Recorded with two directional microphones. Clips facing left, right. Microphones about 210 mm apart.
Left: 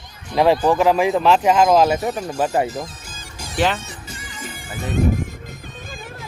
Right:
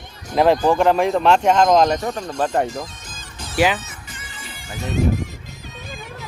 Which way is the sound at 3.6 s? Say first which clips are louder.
Right 2 dB; 5° right (ahead or behind).